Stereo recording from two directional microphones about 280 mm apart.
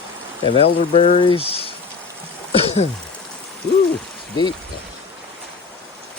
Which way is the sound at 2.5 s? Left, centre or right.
Left.